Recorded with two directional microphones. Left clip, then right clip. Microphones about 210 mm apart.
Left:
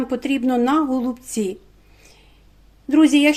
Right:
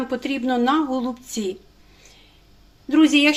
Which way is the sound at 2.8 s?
35° left (ahead or behind).